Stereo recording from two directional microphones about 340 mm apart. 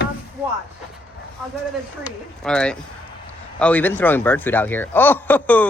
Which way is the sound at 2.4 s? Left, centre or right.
Centre.